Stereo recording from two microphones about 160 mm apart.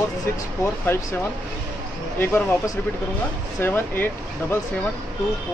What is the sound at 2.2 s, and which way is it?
Speech, 15° left (ahead or behind).